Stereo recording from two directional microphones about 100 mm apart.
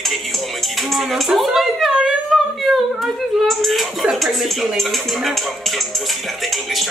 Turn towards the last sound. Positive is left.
turn(degrees=0)  # may be behind; listen again after turning